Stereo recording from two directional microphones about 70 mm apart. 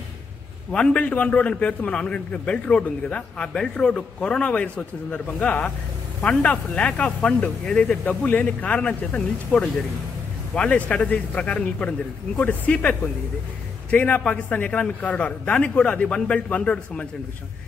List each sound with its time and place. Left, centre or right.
0.7 s a man's voice: centre